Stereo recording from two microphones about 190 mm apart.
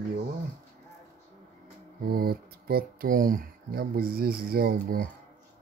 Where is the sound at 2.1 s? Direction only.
55° right (ahead or behind).